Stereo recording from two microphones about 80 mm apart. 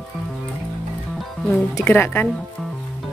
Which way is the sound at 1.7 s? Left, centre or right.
Left.